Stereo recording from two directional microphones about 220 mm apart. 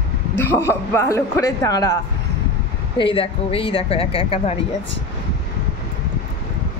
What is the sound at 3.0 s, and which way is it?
Speech, 25° left (ahead or behind).